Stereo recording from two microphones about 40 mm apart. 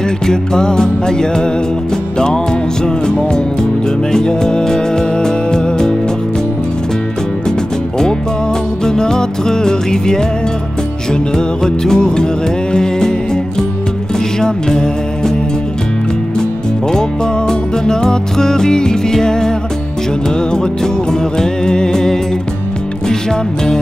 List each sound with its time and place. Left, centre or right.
0.3 s music: centre
8.8 s music: centre
14.4 s music: centre
16.9 s music: centre